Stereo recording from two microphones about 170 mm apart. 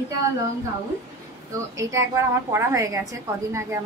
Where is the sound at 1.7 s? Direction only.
20° right (ahead or behind).